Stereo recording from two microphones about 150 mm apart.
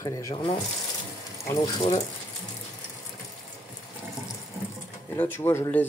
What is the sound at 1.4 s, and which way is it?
Speech, 25° left (ahead or behind).